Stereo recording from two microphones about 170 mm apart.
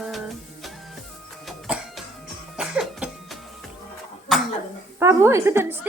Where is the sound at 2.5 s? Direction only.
5° right (ahead or behind).